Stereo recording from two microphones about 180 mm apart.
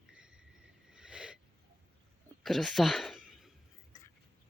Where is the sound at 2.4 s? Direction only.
Centre (ahead or behind).